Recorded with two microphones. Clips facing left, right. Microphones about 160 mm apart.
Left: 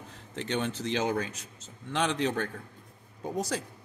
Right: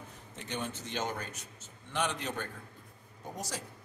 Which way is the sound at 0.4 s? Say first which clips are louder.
Left 7 dB; 80° left.